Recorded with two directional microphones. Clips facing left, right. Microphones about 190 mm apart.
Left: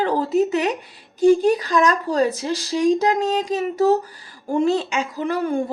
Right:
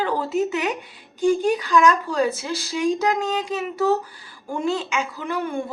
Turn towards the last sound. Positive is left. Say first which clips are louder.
# left 5 dB
turn(degrees=40)  # may be behind; listen again after turning